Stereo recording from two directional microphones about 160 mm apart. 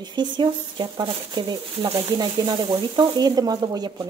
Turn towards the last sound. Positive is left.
turn(degrees=-25)  # may be behind; listen again after turning